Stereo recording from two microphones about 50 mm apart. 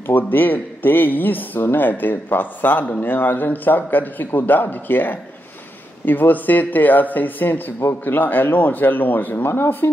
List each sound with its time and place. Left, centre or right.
0.0 s a man's voice: left